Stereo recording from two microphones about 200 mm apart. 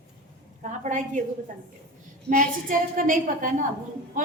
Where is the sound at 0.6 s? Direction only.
40° right (ahead or behind).